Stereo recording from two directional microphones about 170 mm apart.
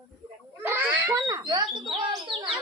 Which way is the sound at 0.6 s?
10° right (ahead or behind).